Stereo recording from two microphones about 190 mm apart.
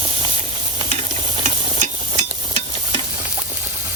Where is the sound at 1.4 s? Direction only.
40° right (ahead or behind).